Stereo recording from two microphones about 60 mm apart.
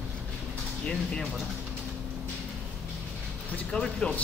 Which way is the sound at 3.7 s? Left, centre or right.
Centre.